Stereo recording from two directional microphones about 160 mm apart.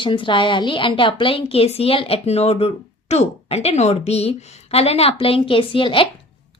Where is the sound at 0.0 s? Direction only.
30° left (ahead or behind).